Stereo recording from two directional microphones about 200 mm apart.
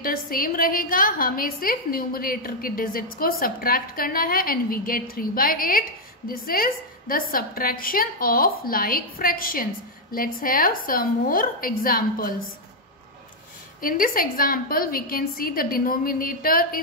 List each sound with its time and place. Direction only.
0.0 s a woman's voice: 45° left (ahead or behind)
13.7 s a woman's voice: 45° left (ahead or behind)